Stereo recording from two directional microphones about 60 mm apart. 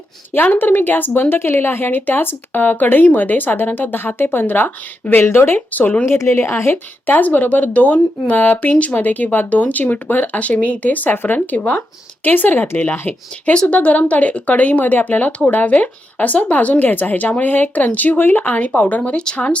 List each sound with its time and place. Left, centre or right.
0.3 s a woman's voice: left
5.5 s speech: left
6.1 s a woman's voice: left
7.1 s a woman's voice: left